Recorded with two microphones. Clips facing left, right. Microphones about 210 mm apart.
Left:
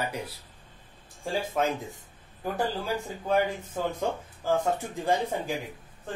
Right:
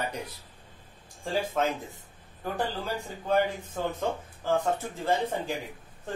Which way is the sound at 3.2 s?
10° left (ahead or behind).